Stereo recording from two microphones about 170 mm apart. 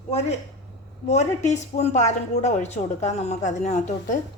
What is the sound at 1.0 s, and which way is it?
Speech, 40° left (ahead or behind).